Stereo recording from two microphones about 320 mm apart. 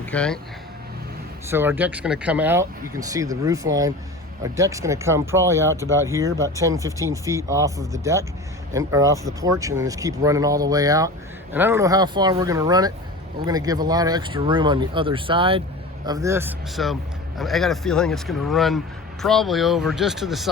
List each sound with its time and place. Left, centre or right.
0.0 s speech: centre
1.5 s speech: centre